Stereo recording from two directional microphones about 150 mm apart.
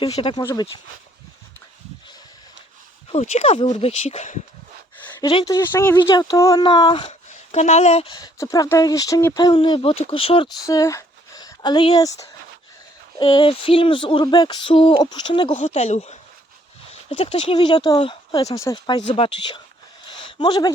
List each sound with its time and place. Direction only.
0.2 s speech: 30° left (ahead or behind)
3.1 s speech: 45° left (ahead or behind)
5.3 s speech: 30° left (ahead or behind)
5.7 s speech: 15° left (ahead or behind)
6.0 s speech: 30° left (ahead or behind)
7.1 s a sound: 50° left (ahead or behind)
8.0 s speech: 30° left (ahead or behind)
9.6 s speech: 35° left (ahead or behind)
10.7 s speech: 20° left (ahead or behind)
15.6 s speech: 45° left (ahead or behind); by 19.0 s 30° left (ahead or behind)
19.0 s speech: 40° left (ahead or behind)
20.1 s a sound: 30° left (ahead or behind)